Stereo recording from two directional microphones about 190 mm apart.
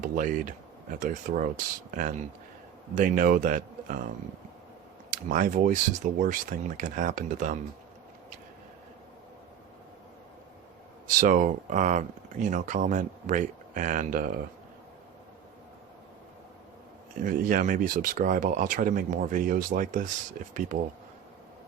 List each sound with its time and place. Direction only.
0.0 s speech: 45° right (ahead or behind)
5.3 s speech: 45° right (ahead or behind)
11.0 s speech: 45° right (ahead or behind)
17.2 s speech: 45° right (ahead or behind)